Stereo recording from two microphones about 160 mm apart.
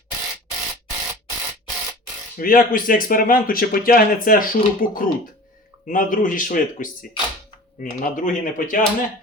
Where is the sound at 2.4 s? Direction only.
60° left (ahead or behind).